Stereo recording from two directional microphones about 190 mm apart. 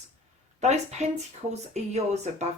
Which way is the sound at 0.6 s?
35° right (ahead or behind).